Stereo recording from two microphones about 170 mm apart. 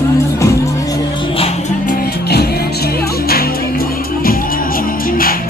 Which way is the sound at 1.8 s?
60° left (ahead or behind).